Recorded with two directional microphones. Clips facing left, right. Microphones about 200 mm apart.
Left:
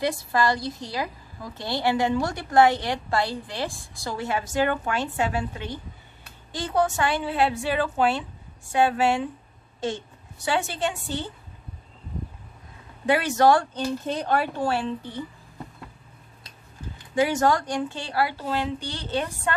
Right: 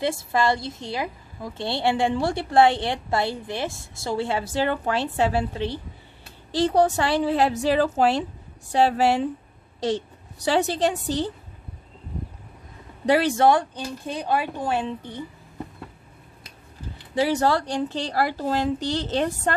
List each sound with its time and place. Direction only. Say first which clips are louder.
0.0 s a woman's voice: right 1 dB; 25° right (ahead or behind)
13.0 s speech: right 2 dB; 35° right (ahead or behind)
13.5 s a woman's voice: left 1 dB; 15° right (ahead or behind)
17.1 s speech: even; 35° right (ahead or behind)